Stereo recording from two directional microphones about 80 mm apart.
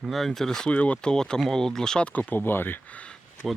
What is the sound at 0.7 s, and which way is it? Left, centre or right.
Speech, centre.